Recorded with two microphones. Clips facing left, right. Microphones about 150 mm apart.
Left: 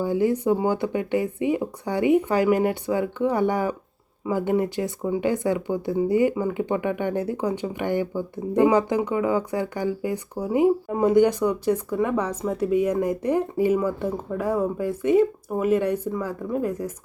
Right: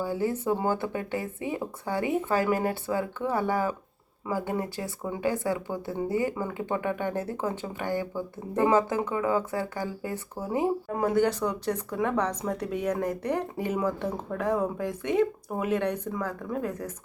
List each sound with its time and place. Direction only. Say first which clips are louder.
0.0 s speech: left 6 dB; 20° left (ahead or behind)